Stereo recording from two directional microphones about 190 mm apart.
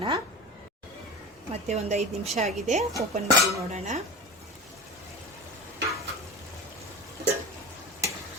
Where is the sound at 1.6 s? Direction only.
35° right (ahead or behind).